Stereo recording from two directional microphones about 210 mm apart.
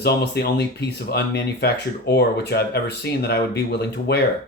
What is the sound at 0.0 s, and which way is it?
Speech, 50° left (ahead or behind).